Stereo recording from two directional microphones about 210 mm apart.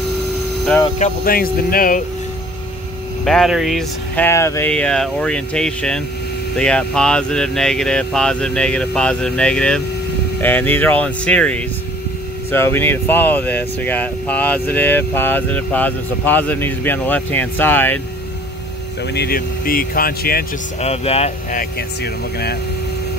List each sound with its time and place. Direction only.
0.9 s speech: 40° left (ahead or behind)
3.3 s speech: centre (ahead or behind)
19.1 s speech: 45° left (ahead or behind)
20.8 s speech: 30° left (ahead or behind); by 22.6 s 50° left (ahead or behind)